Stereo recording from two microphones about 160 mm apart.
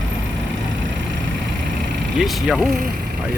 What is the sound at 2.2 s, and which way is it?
Speech, centre (ahead or behind).